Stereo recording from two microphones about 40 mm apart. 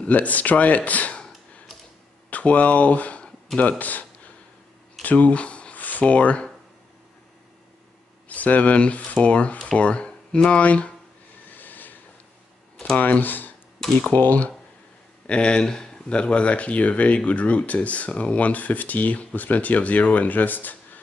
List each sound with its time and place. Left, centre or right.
0.0 s speech: left
2.3 s speech: left
5.0 s speech: left
8.3 s speech: left
11.5 s a sound: left
12.9 s speech: left
13.2 s speech: left
13.8 s speech: centre
14.1 s speech: left
15.2 s speech: left